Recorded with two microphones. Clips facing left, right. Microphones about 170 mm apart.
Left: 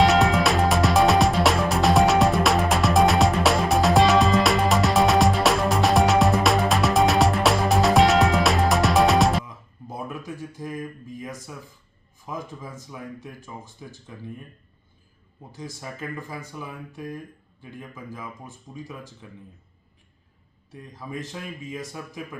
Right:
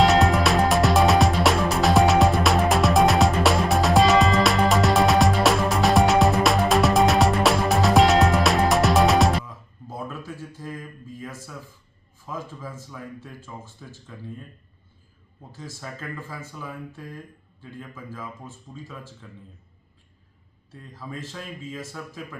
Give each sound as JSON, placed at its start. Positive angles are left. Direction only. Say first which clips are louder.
{"t": 0.0, "sound": "music", "louder": "even", "side_deg": 0}
{"t": 9.5, "sound": "a sound", "louder": "even", "side_deg": 15}
{"t": 12.2, "sound": "speech", "louder": "even", "side_deg": 15}
{"t": 15.5, "sound": "speech", "louder": "left 1 dB", "side_deg": 15}
{"t": 20.9, "sound": "speech", "louder": "left 2 dB", "side_deg": 15}